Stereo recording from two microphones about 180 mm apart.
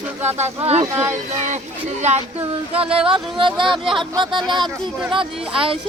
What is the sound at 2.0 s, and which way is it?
Speech, 40° right (ahead or behind).